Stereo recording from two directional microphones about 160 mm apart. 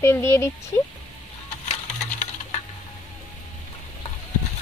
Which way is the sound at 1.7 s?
40° left (ahead or behind).